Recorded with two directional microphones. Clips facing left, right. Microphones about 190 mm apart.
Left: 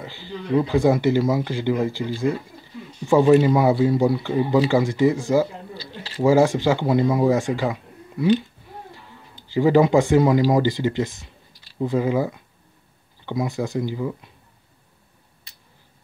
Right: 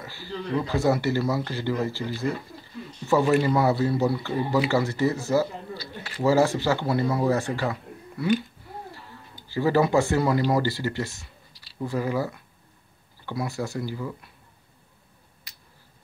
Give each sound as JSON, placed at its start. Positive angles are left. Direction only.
{"t": 0.0, "sound": "speech", "side_deg": 20}
{"t": 3.1, "sound": "speech", "side_deg": 15}
{"t": 5.9, "sound": "speech", "side_deg": 25}
{"t": 6.2, "sound": "speech", "side_deg": 15}
{"t": 8.9, "sound": "a sound", "side_deg": 15}
{"t": 10.5, "sound": "speech", "side_deg": 15}